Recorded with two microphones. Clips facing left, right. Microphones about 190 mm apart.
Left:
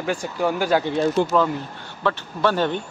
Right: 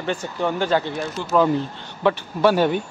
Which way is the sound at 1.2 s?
60° left (ahead or behind).